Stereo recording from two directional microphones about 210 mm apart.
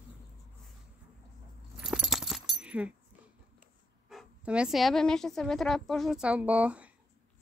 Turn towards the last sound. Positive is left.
turn(degrees=-5)  # may be behind; listen again after turning